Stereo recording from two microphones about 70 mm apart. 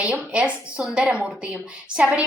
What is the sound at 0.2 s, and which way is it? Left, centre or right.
A woman's voice, centre.